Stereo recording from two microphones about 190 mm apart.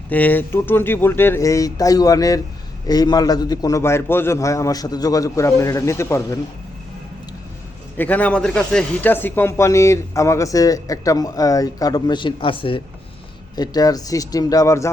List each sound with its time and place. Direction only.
0.1 s speech: 10° left (ahead or behind)
7.9 s speech: 10° left (ahead or behind)